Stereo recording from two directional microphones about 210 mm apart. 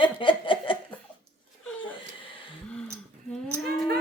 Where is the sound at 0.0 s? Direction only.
25° left (ahead or behind).